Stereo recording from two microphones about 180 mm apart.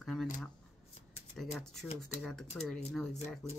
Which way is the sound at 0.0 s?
Centre (ahead or behind).